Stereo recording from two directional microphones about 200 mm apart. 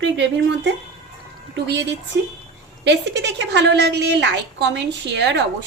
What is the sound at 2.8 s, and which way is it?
A woman's voice, 60° right (ahead or behind).